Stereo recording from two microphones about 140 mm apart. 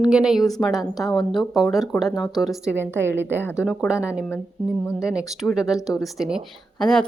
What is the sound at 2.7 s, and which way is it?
Speech, 15° right (ahead or behind).